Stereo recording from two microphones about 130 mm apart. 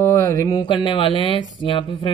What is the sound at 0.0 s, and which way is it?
Speech, 20° left (ahead or behind).